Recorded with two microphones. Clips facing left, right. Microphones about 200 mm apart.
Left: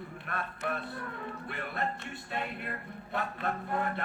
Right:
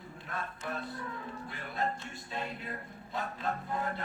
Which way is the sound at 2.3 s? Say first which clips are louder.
Left 2 dB; 60° left (ahead or behind).